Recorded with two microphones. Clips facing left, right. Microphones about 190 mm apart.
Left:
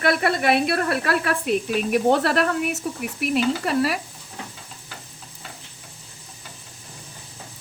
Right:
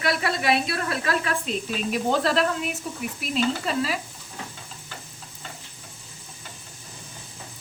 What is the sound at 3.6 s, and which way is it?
Speech, 65° left (ahead or behind).